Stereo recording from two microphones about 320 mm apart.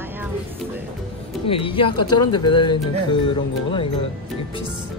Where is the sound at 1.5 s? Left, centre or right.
Centre.